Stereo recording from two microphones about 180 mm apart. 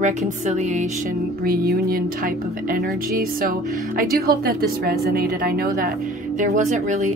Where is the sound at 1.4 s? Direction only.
60° right (ahead or behind).